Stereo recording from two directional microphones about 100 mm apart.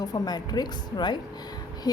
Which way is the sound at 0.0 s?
40° left (ahead or behind).